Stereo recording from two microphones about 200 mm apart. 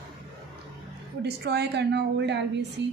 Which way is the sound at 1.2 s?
55° right (ahead or behind).